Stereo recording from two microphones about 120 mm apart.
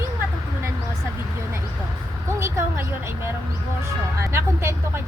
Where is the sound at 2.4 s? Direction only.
25° right (ahead or behind).